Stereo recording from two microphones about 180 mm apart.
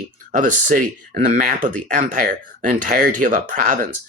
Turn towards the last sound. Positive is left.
turn(degrees=-50)  # may be behind; listen again after turning